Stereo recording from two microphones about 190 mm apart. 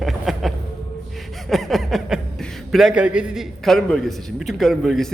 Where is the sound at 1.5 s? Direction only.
Centre (ahead or behind).